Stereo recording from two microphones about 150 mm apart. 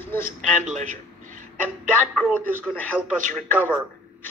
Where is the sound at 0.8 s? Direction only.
55° right (ahead or behind).